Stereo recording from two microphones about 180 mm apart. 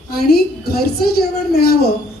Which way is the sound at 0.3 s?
60° left (ahead or behind).